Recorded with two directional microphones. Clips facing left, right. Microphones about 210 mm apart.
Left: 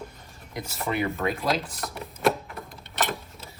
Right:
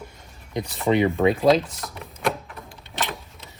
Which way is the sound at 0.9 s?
20° right (ahead or behind).